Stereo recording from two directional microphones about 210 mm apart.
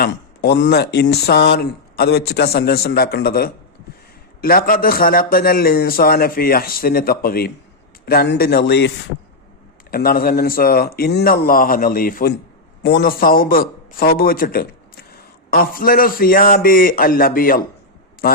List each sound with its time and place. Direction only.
0.0 s speech: 50° left (ahead or behind)
9.9 s speech: 45° left (ahead or behind)